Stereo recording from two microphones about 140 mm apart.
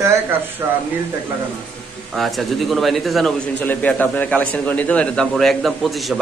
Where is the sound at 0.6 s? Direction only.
20° right (ahead or behind).